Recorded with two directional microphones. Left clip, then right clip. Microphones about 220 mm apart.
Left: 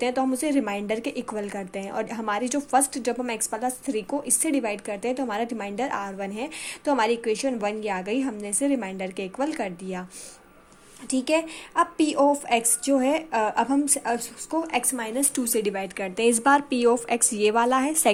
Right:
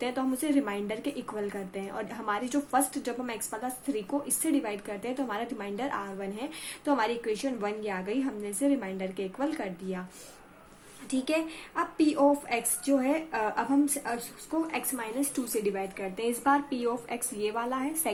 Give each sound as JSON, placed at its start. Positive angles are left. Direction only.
{"t": 0.0, "sound": "speech", "side_deg": 30}
{"t": 11.1, "sound": "speech", "side_deg": 35}